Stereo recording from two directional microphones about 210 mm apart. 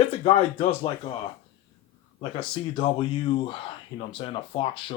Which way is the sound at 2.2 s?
25° left (ahead or behind).